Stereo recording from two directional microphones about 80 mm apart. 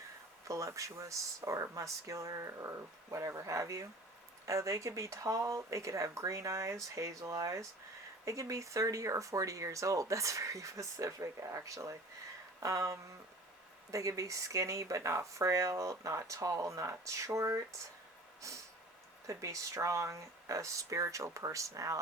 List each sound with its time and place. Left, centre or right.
0.4 s speech: right
12.5 s a sound: right
13.9 s speech: right